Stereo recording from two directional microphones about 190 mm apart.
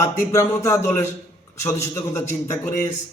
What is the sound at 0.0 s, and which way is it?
Speech, 15° left (ahead or behind).